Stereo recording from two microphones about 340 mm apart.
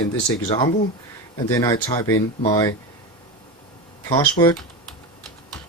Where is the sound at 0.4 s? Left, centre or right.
Centre.